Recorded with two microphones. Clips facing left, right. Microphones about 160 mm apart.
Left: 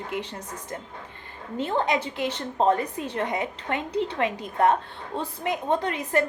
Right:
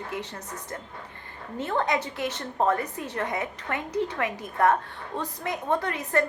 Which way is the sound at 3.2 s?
15° left (ahead or behind).